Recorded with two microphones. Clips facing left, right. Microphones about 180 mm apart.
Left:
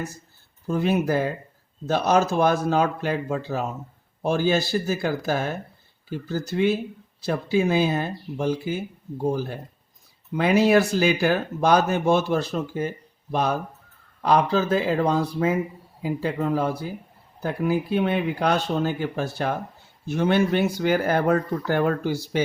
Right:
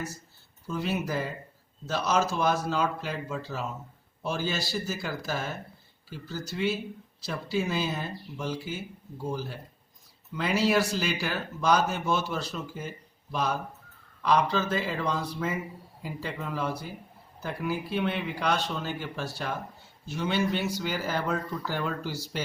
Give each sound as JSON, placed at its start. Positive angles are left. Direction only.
{"t": 0.7, "sound": "speech", "side_deg": 50}
{"t": 7.3, "sound": "speech", "side_deg": 50}
{"t": 15.2, "sound": "speech", "side_deg": 60}
{"t": 16.4, "sound": "speech", "side_deg": 45}